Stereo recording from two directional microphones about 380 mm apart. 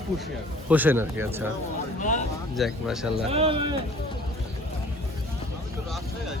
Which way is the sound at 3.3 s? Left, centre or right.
Centre.